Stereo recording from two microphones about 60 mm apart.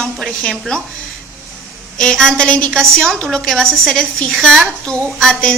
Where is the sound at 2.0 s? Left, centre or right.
Centre.